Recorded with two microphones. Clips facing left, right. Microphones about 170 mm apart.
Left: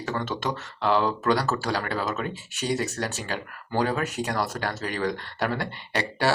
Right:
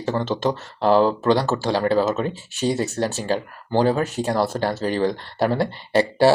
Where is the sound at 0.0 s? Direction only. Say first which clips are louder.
Right 7 dB; 30° right (ahead or behind).